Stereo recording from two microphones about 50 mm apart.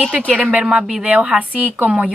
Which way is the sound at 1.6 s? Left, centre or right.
Right.